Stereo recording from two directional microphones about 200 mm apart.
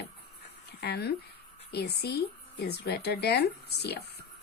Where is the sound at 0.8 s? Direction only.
55° left (ahead or behind).